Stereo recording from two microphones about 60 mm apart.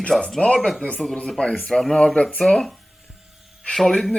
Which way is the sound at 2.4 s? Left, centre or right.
Left.